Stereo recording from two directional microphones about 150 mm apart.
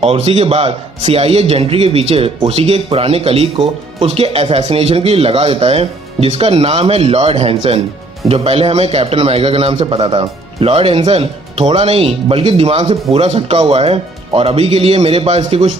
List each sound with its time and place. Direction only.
0.0 s a man's voice: 40° right (ahead or behind)